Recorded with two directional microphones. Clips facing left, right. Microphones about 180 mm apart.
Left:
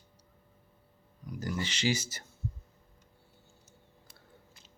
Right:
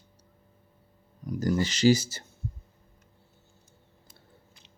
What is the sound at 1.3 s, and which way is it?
Speech, 40° right (ahead or behind).